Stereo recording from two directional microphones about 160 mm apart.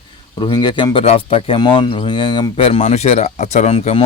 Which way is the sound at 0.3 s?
25° left (ahead or behind).